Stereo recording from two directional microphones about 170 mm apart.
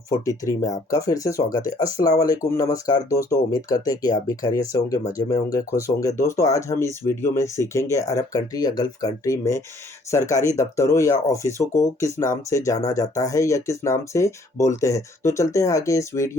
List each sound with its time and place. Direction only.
0.1 s speech: 20° left (ahead or behind)